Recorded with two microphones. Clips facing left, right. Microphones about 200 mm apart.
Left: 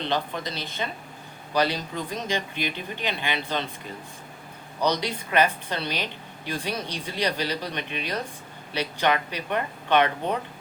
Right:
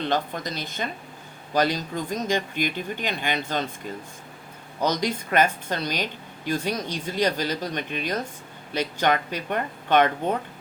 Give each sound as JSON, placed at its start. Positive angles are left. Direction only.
{"t": 0.0, "sound": "a woman's voice", "side_deg": -45}
{"t": 4.8, "sound": "a woman's voice", "side_deg": -45}